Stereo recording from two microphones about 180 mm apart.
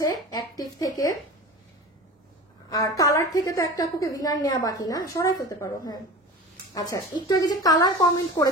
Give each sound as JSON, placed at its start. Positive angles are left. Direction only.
{"t": 0.0, "sound": "a woman's voice", "side_deg": 20}
{"t": 2.7, "sound": "a woman's voice", "side_deg": 20}